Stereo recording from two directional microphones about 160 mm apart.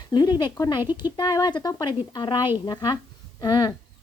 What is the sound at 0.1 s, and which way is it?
A woman's voice, 25° left (ahead or behind).